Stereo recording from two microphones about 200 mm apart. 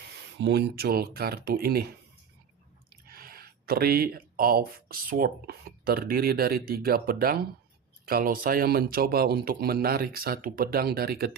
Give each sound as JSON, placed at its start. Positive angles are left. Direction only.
{"t": 0.3, "sound": "speech", "side_deg": -60}
{"t": 3.1, "sound": "speech", "side_deg": -45}